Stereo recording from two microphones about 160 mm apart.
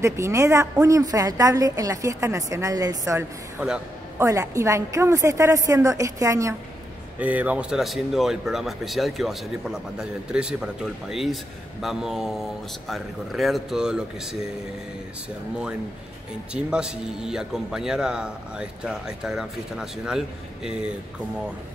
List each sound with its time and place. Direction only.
0.0 s a woman's voice: 20° right (ahead or behind)
7.2 s speech: 10° right (ahead or behind)
16.5 s speech: 5° right (ahead or behind)